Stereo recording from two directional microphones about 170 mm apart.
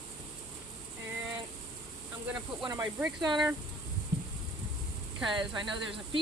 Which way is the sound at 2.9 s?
5° right (ahead or behind).